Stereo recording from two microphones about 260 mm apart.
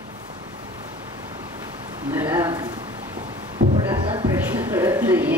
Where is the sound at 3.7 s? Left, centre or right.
Centre.